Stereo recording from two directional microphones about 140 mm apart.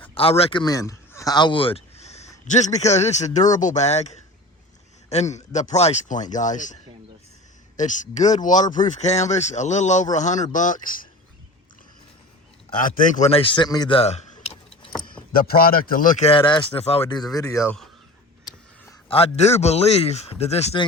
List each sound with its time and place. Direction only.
0.1 s speech: 40° left (ahead or behind)
0.6 s a sound: 25° left (ahead or behind); by 2.3 s 50° left (ahead or behind)
2.5 s speech: 55° left (ahead or behind)
5.3 s speech: 55° left (ahead or behind)
7.8 s speech: 60° left (ahead or behind); by 11.1 s 80° left
12.8 s speech: 75° left (ahead or behind)
13.2 s a man's voice: 40° left (ahead or behind)
15.3 s a man's voice: 90° left
16.2 s speech: 40° left (ahead or behind)
17.3 s a man's voice: 25° left (ahead or behind)
17.7 s speech: centre (ahead or behind)
19.0 s speech: 45° left (ahead or behind)